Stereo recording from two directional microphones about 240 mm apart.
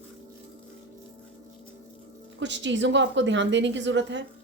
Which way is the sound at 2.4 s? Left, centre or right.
Right.